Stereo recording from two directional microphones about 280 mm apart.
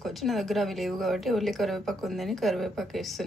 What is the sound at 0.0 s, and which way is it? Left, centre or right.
A woman's voice, centre.